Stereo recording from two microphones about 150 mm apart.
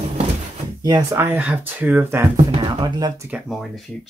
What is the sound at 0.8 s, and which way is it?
Speech, 25° right (ahead or behind).